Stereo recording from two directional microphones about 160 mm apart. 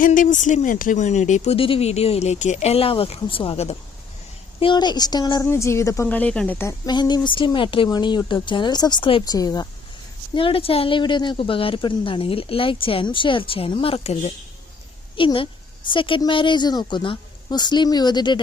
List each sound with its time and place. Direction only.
0.0 s speech: 55° left (ahead or behind)
1.5 s a woman's voice: 35° left (ahead or behind); by 6.7 s 10° left (ahead or behind)
6.8 s a woman's voice: 25° left (ahead or behind)
10.3 s a woman's voice: 35° left (ahead or behind)